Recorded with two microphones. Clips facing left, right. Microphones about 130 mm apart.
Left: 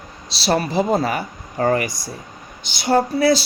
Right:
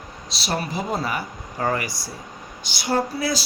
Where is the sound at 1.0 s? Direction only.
65° left (ahead or behind).